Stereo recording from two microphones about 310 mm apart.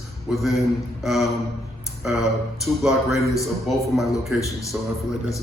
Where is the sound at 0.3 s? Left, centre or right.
Centre.